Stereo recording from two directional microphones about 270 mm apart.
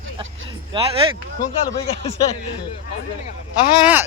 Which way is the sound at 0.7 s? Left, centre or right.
Right.